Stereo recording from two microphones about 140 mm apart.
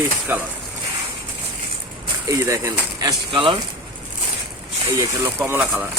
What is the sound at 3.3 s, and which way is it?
Speech, 40° right (ahead or behind).